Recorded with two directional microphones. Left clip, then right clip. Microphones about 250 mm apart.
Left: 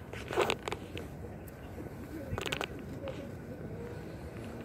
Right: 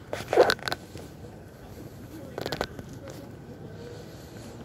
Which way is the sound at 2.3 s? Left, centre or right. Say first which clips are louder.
Right 4 dB; centre.